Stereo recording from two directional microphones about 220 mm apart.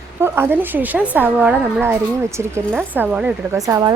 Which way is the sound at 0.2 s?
10° right (ahead or behind).